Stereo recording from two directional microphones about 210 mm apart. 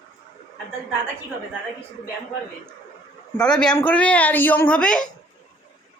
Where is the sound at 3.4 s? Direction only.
5° left (ahead or behind).